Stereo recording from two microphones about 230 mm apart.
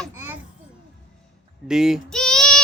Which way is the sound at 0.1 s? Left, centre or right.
Centre.